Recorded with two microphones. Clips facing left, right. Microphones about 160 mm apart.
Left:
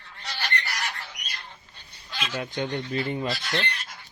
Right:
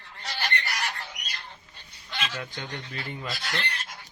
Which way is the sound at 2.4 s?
25° left (ahead or behind).